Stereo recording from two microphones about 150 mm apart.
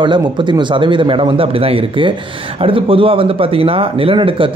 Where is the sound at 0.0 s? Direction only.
30° right (ahead or behind).